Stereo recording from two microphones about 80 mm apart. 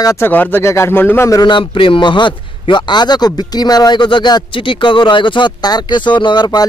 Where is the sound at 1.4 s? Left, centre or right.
Left.